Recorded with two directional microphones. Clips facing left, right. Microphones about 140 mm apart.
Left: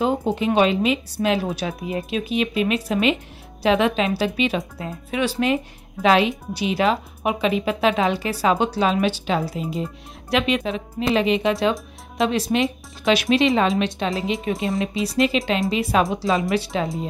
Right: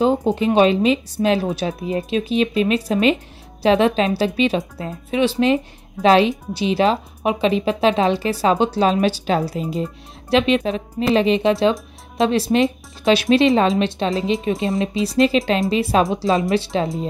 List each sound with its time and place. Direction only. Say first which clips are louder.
0.0 s a woman's voice: right 4 dB; 25° right (ahead or behind)
10.3 s a woman's voice: right 4 dB; 30° right (ahead or behind)